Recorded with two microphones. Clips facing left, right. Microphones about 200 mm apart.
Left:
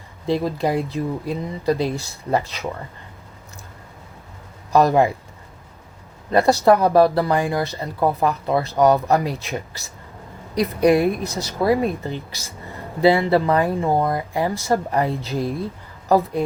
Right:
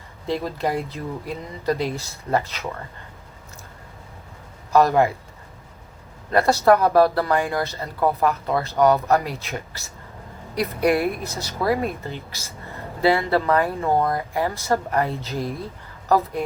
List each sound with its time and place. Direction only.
0.3 s speech: 15° left (ahead or behind)
4.7 s speech: 15° left (ahead or behind)
6.3 s speech: 15° left (ahead or behind)